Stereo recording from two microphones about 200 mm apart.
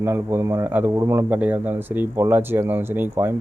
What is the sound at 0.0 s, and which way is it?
A man's voice, 10° right (ahead or behind).